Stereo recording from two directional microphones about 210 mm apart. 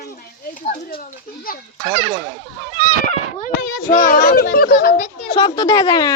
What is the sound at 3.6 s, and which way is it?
A child's voice, 40° left (ahead or behind).